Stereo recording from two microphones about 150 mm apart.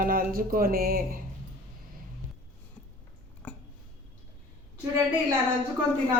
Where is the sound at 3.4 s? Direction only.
10° left (ahead or behind).